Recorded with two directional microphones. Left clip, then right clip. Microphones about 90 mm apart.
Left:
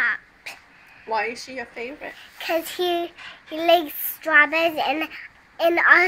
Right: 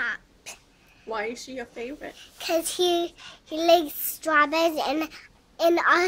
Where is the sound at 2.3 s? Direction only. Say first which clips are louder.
Left 1 dB; 40° right (ahead or behind).